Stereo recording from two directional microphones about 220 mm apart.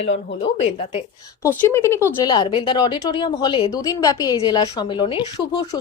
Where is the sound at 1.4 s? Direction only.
10° left (ahead or behind).